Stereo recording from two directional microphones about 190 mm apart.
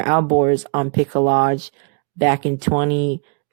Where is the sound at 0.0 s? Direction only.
35° right (ahead or behind).